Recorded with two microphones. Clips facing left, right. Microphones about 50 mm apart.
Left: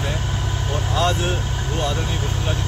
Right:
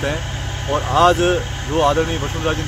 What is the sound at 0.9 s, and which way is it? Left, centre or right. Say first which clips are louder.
Speech: right 9 dB; right.